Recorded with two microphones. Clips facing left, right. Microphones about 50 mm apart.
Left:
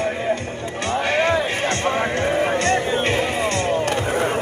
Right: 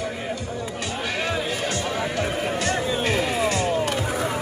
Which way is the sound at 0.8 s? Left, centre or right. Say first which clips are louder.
Left 9 dB; left.